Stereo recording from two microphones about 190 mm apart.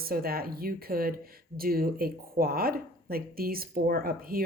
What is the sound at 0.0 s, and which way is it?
Speech, 50° right (ahead or behind).